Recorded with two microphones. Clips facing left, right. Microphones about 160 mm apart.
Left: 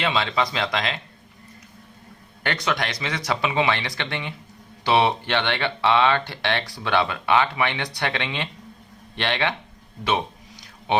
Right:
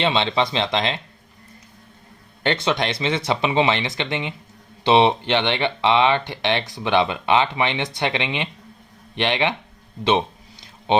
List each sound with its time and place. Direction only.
0.0 s speech: 25° right (ahead or behind)
2.4 s speech: 25° right (ahead or behind)